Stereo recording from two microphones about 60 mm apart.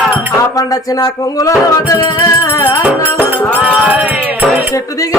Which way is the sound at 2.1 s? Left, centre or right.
Left.